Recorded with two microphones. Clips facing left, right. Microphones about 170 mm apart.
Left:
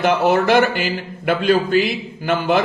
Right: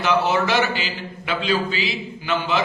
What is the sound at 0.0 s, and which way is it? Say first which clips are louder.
Speech: left 4 dB; 50° left (ahead or behind).